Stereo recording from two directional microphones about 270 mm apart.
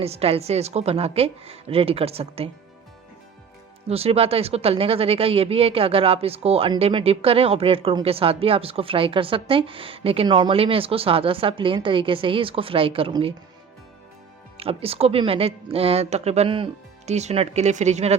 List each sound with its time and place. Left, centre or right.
0.0 s speech: right
3.8 s speech: right
14.6 s speech: right